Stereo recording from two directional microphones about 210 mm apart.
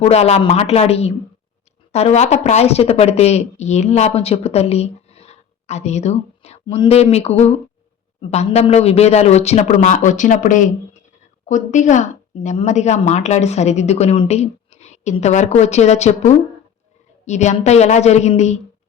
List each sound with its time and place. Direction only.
0.0 s a woman's voice: 30° left (ahead or behind)